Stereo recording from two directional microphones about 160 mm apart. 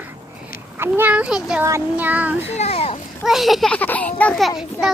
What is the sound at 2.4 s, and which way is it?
Speech, 40° left (ahead or behind).